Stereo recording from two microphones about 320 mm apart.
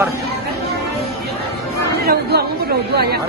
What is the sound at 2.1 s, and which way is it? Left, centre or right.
Speech, right.